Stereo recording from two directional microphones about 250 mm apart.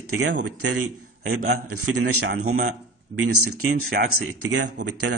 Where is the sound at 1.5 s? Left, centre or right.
Right.